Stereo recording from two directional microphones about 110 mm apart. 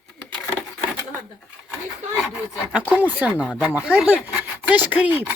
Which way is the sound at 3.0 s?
15° right (ahead or behind).